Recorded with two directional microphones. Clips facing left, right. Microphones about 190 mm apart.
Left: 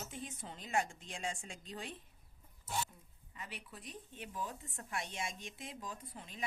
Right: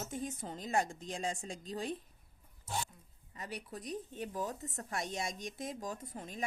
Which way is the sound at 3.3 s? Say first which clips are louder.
Right 6 dB; 40° right (ahead or behind).